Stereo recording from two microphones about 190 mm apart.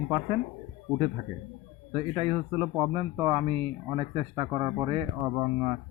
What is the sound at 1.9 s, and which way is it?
Speech, 30° right (ahead or behind).